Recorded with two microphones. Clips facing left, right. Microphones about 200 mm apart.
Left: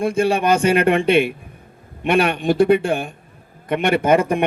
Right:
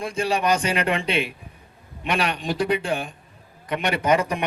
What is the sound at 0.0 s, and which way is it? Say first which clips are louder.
A man's voice: left 6 dB; 55° left (ahead or behind).